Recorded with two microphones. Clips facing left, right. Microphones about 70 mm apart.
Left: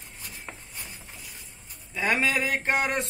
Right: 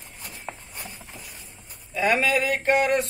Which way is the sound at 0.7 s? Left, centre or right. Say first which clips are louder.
Right 3 dB; right.